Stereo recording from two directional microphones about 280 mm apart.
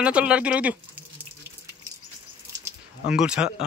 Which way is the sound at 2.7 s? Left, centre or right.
Centre.